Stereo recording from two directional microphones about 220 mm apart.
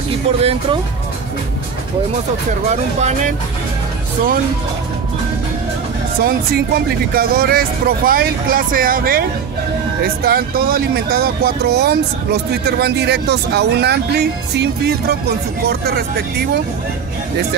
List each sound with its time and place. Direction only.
0.4 s speech: 25° right (ahead or behind)
2.7 s speech: 30° right (ahead or behind)
6.2 s speech: 45° right (ahead or behind)